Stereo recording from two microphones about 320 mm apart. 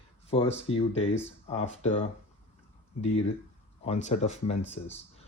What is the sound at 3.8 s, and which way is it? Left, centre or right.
Speech, centre.